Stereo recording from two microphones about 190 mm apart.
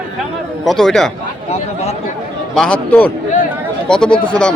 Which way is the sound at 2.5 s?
5° left (ahead or behind).